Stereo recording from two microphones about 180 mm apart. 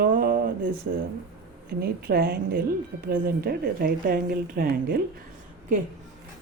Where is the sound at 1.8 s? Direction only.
60° right (ahead or behind).